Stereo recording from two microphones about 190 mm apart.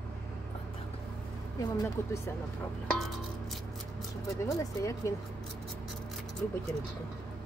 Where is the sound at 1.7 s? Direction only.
15° left (ahead or behind).